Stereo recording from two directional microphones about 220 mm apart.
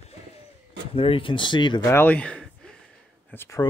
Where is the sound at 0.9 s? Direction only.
25° left (ahead or behind).